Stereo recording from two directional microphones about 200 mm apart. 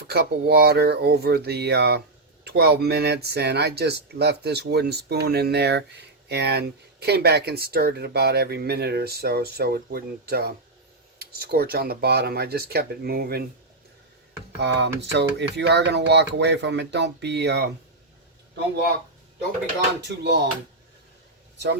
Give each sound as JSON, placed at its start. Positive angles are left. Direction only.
{"t": 0.0, "sound": "speech", "side_deg": -50}
{"t": 14.5, "sound": "speech", "side_deg": -60}
{"t": 20.0, "sound": "speech", "side_deg": -60}